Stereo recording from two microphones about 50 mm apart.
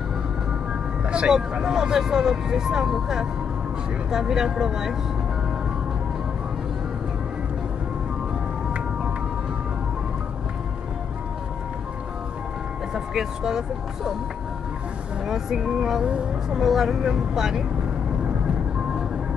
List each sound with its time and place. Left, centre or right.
1.0 s vehicle: right
1.3 s speech: centre
12.9 s speech: centre
15.2 s speech: centre